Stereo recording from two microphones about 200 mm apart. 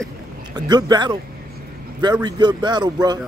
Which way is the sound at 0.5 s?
20° right (ahead or behind).